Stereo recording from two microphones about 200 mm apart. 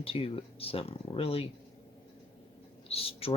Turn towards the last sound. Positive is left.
turn(degrees=30)  # may be behind; listen again after turning